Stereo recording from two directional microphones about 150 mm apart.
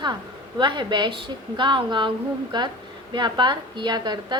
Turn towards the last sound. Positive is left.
turn(degrees=-30)  # may be behind; listen again after turning